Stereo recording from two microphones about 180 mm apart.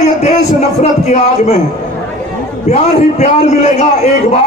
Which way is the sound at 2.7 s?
40° left (ahead or behind).